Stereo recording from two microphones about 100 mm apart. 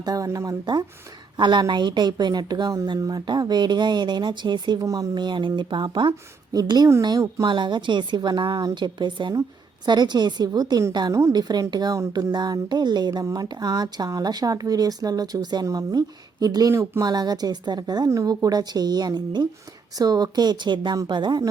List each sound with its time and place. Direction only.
0.0 s speech: 40° right (ahead or behind)